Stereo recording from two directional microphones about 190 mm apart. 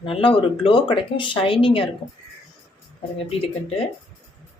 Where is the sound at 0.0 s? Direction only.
25° left (ahead or behind).